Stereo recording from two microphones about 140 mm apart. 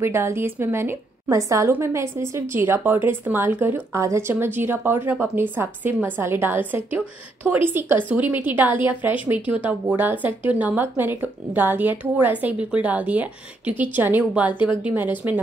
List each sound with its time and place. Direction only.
0.0 s a woman's voice: 20° right (ahead or behind)